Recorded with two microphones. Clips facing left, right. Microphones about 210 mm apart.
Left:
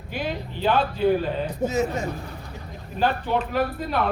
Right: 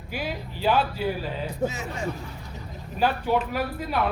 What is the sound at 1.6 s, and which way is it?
Speech, 40° left (ahead or behind).